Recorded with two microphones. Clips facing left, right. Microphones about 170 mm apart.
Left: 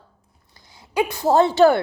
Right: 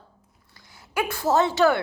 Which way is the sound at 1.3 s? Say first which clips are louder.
Left 5 dB; 30° left (ahead or behind).